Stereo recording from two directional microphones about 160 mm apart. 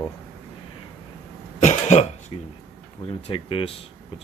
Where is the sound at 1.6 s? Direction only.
45° left (ahead or behind).